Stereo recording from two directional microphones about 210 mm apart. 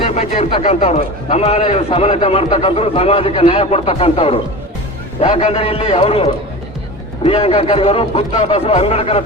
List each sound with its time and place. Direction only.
0.1 s a man's voice: 30° left (ahead or behind)